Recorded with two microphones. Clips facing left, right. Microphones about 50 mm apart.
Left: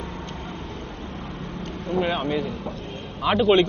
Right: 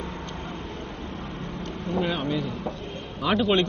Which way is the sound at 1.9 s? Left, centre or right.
Left.